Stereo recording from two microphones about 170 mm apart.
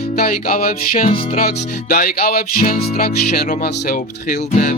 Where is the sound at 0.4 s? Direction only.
60° left (ahead or behind).